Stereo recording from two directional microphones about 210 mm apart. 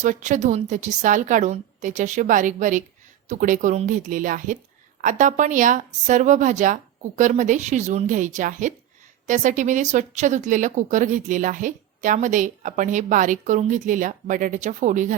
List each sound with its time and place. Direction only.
0.0 s a woman's voice: 35° right (ahead or behind)